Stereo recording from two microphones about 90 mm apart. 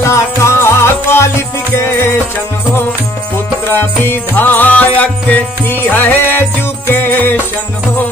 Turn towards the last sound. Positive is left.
turn(degrees=20)  # may be behind; listen again after turning